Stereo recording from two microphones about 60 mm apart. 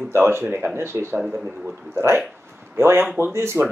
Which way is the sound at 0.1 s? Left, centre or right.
Right.